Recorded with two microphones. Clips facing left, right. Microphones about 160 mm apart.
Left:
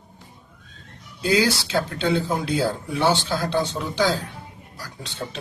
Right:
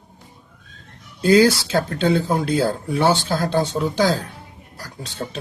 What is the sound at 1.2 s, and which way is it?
Speech, 45° right (ahead or behind).